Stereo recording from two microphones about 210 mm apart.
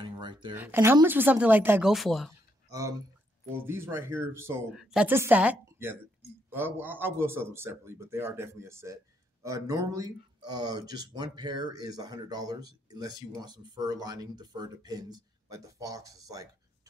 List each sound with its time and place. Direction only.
0.0 s a sound: 20° right (ahead or behind)
0.6 s a man's voice: 10° right (ahead or behind)
2.7 s a man's voice: 15° right (ahead or behind)